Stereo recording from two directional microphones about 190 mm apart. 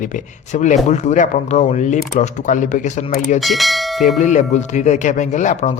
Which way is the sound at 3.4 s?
Centre (ahead or behind).